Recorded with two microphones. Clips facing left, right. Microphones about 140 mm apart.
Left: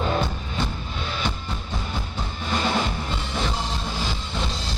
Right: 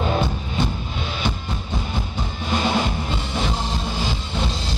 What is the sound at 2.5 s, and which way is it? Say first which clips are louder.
Music: right 3 dB; 15° right (ahead or behind).